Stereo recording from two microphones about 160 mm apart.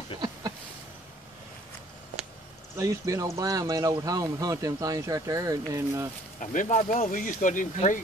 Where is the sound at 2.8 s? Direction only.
20° right (ahead or behind).